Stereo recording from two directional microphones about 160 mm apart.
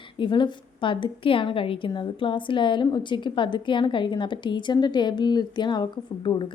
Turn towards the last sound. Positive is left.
turn(degrees=30)  # may be behind; listen again after turning